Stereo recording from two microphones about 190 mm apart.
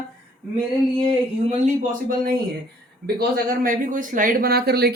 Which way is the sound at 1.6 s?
45° right (ahead or behind).